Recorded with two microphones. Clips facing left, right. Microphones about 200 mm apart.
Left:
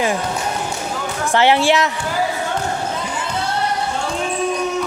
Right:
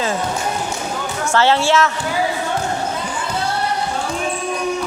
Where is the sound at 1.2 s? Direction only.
15° left (ahead or behind).